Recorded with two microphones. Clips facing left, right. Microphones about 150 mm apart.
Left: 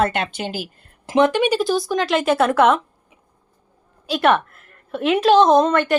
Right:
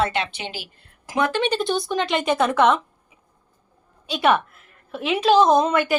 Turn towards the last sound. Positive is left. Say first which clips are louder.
# left 3 dB
turn(degrees=-5)  # may be behind; listen again after turning